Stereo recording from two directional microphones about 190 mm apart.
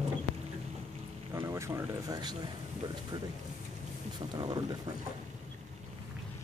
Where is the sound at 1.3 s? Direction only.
15° right (ahead or behind).